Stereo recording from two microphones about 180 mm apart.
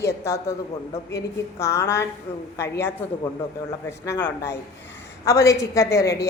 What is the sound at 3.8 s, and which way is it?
A woman's voice, 15° left (ahead or behind).